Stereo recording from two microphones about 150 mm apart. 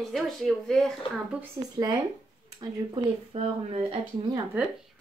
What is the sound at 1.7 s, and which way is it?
Speech, 30° right (ahead or behind).